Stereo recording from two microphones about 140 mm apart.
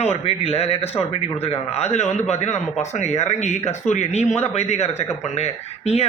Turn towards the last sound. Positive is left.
turn(degrees=50)  # may be behind; listen again after turning